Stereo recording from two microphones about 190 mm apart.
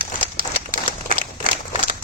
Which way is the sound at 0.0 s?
50° right (ahead or behind).